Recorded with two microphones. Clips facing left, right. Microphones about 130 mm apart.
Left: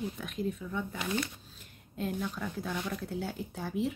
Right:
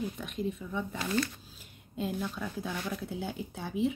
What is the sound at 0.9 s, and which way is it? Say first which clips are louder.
Speech: right 4 dB; 15° left (ahead or behind).